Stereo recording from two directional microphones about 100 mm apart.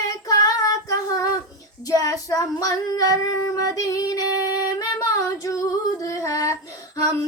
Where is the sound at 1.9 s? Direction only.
35° left (ahead or behind).